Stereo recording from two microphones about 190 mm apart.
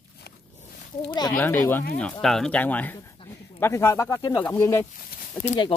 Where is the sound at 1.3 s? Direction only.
10° left (ahead or behind).